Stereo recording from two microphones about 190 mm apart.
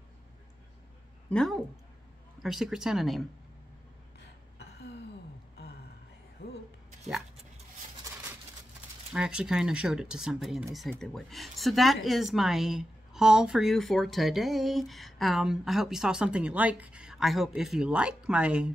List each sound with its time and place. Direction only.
1.3 s speech: 5° left (ahead or behind)
4.6 s gasp: 60° left (ahead or behind)
7.9 s a sound: 15° right (ahead or behind)
9.1 s speech: 5° right (ahead or behind)